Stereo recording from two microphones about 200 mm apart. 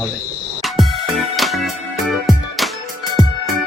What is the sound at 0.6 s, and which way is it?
Music, centre (ahead or behind).